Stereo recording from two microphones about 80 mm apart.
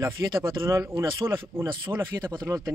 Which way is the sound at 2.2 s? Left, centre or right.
Right.